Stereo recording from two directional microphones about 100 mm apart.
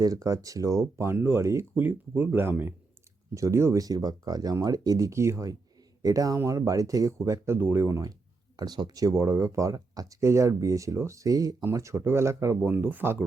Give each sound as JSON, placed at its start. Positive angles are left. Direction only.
{"t": 0.0, "sound": "speech", "side_deg": -35}
{"t": 8.5, "sound": "speech", "side_deg": -40}